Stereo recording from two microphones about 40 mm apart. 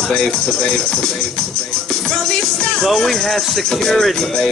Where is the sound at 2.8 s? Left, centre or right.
Centre.